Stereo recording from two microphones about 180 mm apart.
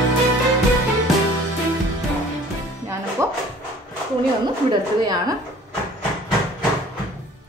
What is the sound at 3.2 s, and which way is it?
Dog, 15° right (ahead or behind).